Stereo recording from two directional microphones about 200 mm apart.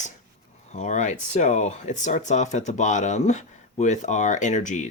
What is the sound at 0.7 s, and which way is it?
Speech, 35° left (ahead or behind).